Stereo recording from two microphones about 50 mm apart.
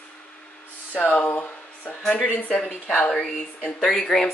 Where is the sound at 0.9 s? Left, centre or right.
Left.